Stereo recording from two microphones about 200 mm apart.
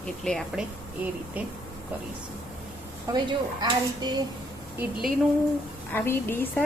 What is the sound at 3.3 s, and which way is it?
Speech, 20° right (ahead or behind).